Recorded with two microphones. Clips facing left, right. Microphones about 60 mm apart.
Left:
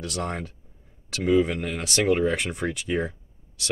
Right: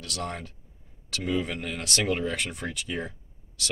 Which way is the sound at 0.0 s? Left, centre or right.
Left.